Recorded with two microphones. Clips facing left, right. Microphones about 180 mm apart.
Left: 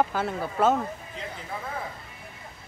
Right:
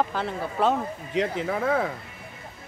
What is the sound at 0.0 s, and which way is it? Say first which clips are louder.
Speech: left 1 dB; 5° left (ahead or behind).